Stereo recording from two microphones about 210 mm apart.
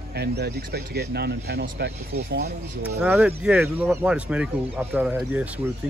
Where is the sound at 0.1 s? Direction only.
50° right (ahead or behind).